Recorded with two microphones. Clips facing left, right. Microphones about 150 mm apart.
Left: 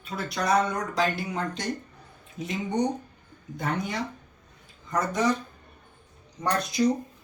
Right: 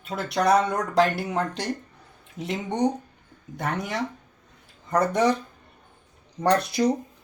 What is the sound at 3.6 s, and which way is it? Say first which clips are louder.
Speech: right 1 dB; 75° right (ahead or behind).